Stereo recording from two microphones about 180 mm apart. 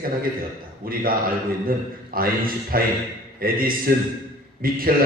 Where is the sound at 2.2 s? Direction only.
55° right (ahead or behind).